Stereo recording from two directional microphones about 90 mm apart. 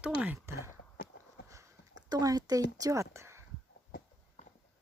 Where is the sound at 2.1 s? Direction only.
45° right (ahead or behind).